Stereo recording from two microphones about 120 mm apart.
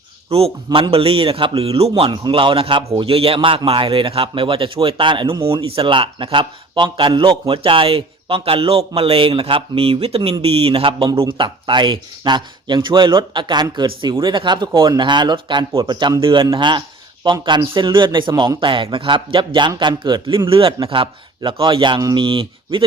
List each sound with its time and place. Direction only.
0.3 s a man's voice: 50° right (ahead or behind)
2.0 s a man's voice: 40° right (ahead or behind)